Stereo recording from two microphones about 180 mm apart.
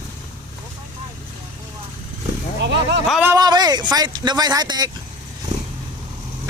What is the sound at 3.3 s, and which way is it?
Speech, 20° right (ahead or behind).